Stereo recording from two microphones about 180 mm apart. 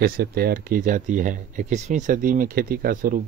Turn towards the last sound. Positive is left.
turn(degrees=-55)  # may be behind; listen again after turning